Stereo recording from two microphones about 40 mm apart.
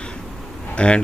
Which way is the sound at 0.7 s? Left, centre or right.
Left.